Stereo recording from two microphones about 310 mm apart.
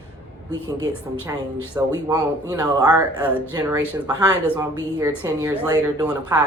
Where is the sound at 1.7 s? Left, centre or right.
Centre.